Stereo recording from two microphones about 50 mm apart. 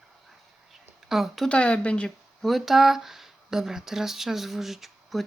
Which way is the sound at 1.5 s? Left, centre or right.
Left.